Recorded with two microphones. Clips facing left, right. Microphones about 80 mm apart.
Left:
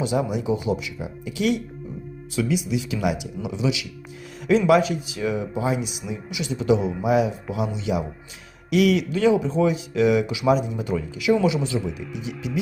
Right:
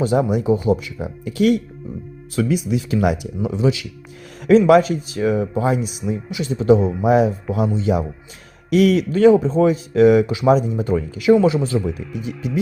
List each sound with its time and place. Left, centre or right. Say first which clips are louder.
0.0 s speech: right 6 dB; right